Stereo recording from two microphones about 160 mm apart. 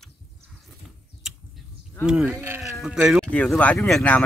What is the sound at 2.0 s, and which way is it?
Speech, 5° right (ahead or behind).